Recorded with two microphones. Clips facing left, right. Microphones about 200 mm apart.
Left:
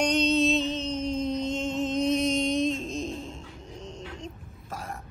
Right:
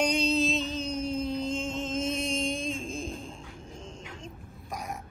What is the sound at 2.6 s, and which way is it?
Music, 40° left (ahead or behind).